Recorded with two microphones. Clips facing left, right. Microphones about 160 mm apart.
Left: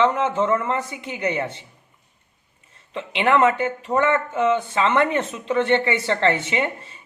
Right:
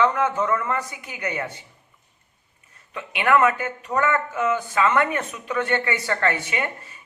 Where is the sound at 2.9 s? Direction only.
25° left (ahead or behind).